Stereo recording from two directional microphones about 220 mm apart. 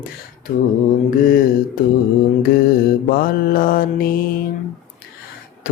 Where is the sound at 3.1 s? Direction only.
40° left (ahead or behind).